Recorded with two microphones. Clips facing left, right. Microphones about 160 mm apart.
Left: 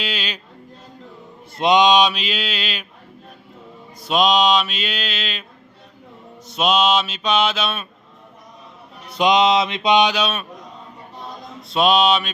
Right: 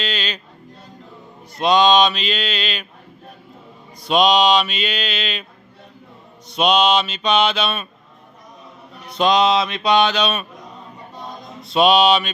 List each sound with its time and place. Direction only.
0.0 s mantra: 10° left (ahead or behind)
1.5 s mantra: 20° left (ahead or behind)
4.0 s mantra: centre (ahead or behind)
6.5 s mantra: 5° left (ahead or behind)
9.0 s mantra: 15° left (ahead or behind)
11.7 s mantra: centre (ahead or behind)